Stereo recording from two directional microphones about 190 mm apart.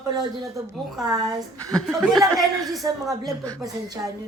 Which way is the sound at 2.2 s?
20° right (ahead or behind).